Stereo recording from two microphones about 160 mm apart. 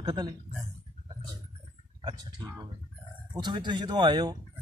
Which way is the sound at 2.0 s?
25° right (ahead or behind).